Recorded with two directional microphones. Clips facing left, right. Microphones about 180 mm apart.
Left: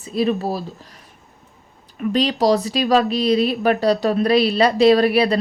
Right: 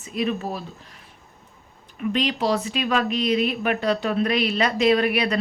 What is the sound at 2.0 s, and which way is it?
Speech, 35° left (ahead or behind).